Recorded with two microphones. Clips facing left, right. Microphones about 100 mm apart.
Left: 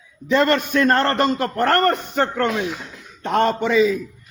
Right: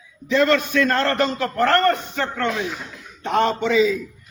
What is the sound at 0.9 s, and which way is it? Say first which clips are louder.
A man's voice: left 3 dB; 50° left (ahead or behind).